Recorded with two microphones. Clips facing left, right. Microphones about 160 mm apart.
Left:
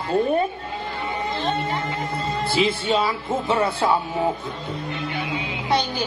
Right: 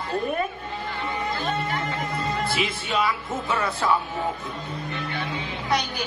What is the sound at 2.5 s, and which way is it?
Speech, 30° left (ahead or behind).